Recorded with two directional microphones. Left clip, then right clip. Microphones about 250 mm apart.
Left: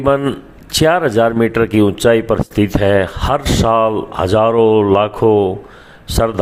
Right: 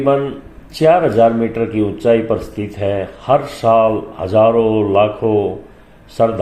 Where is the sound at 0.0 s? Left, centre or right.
Left.